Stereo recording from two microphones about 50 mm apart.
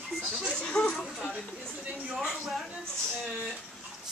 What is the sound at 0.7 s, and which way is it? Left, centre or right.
Speech, left.